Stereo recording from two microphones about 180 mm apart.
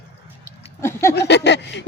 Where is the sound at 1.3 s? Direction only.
75° left (ahead or behind).